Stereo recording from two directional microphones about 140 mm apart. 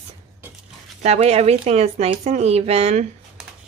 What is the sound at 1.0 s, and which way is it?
Speech, 50° right (ahead or behind).